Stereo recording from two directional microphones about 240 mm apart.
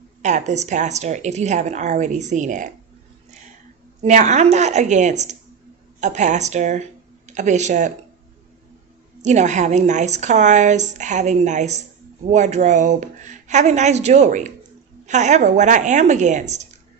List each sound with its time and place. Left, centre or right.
0.2 s a woman's voice: right
4.0 s a woman's voice: right
9.2 s a woman's voice: right